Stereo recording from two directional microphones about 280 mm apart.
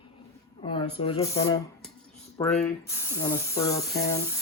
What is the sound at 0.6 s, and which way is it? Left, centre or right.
Speech, centre.